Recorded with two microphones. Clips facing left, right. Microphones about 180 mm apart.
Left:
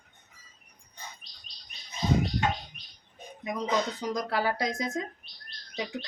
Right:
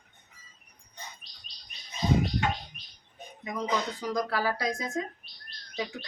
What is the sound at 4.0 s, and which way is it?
Speech, 20° left (ahead or behind).